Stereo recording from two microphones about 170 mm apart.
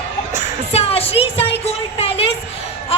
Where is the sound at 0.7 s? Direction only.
35° left (ahead or behind).